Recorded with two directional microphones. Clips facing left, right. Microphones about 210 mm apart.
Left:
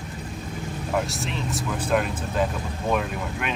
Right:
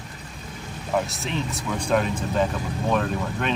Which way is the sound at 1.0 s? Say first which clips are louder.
Right 1 dB; centre (ahead or behind).